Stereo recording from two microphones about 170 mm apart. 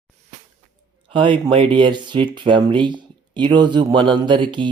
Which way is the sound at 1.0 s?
30° right (ahead or behind).